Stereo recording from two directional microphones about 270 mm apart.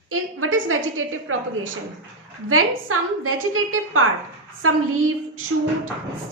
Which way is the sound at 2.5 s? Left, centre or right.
Right.